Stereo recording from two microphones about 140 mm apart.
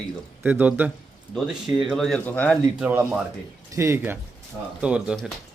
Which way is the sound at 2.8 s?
10° right (ahead or behind).